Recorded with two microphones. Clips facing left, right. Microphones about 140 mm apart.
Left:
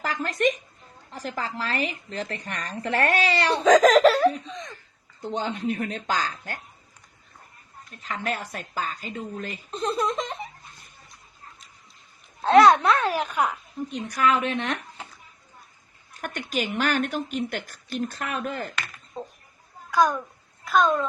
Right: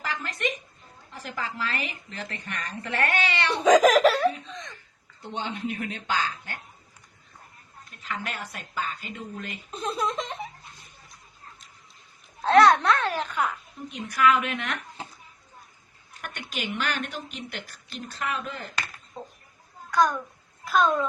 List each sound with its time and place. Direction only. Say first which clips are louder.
0.0 s a sound: left 6 dB; 40° left (ahead or behind)
1.1 s speech: left 3 dB; 35° left (ahead or behind)
3.6 s a child's voice: left 1 dB; 10° right (ahead or behind)
4.4 s a sound: left 3 dB; centre (ahead or behind)
5.3 s speech: left 4 dB; 40° left (ahead or behind)
8.0 s speech: left 4 dB; 35° left (ahead or behind)
9.7 s a child's voice: left 3 dB; centre (ahead or behind)
12.4 s a child's voice: left 2 dB; centre (ahead or behind)
13.9 s speech: right 1 dB; 35° left (ahead or behind)
16.2 s speech: left 6 dB; 45° left (ahead or behind)
20.7 s a child's voice: left 1 dB; centre (ahead or behind)